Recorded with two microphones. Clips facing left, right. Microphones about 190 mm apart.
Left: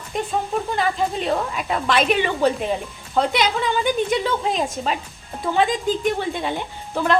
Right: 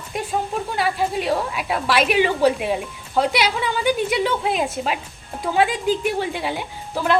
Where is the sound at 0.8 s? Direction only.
5° right (ahead or behind).